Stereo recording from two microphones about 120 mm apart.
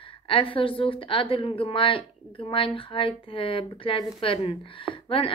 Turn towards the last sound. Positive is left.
turn(degrees=45)  # may be behind; listen again after turning